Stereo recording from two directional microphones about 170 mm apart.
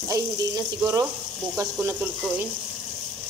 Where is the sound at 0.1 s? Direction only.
20° right (ahead or behind).